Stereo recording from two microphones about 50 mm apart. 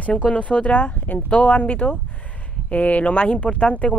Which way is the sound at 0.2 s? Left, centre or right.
Left.